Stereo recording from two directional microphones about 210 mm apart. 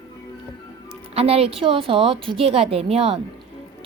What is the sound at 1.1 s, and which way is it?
A woman's voice, 30° right (ahead or behind).